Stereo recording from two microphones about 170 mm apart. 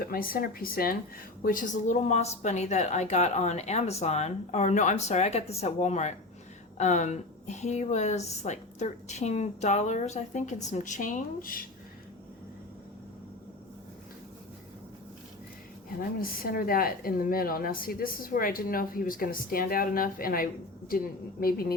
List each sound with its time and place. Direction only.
0.0 s a woman's voice: 60° left (ahead or behind)
16.0 s a woman's voice: 60° left (ahead or behind)